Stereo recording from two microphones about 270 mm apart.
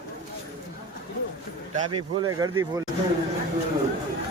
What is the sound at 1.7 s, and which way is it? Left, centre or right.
Speech, centre.